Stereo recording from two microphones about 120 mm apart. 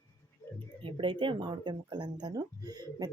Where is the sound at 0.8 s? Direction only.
45° right (ahead or behind).